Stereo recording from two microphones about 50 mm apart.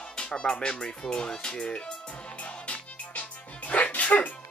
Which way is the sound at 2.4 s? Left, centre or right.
Left.